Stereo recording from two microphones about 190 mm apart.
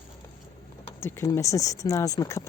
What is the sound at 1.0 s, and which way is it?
Speech, 15° left (ahead or behind).